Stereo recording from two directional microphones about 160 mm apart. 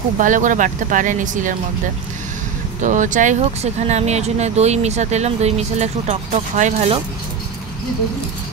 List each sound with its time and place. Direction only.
0.2 s speech: 55° right (ahead or behind)
2.8 s speech: 50° right (ahead or behind)